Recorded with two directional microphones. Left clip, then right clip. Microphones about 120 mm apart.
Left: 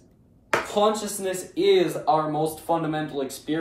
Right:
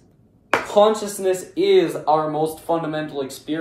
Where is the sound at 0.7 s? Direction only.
15° right (ahead or behind).